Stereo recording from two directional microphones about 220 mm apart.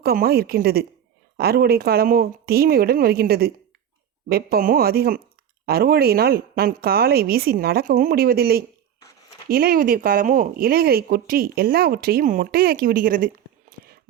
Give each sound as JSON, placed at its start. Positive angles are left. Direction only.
{"t": 0.0, "sound": "speech", "side_deg": -45}